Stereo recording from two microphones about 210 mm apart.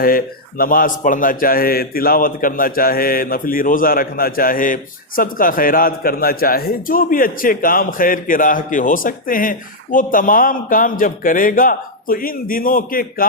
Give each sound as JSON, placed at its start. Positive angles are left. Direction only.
{"t": 0.0, "sound": "a man's voice", "side_deg": 45}